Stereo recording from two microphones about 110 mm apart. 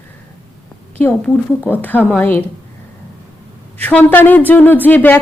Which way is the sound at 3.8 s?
15° left (ahead or behind).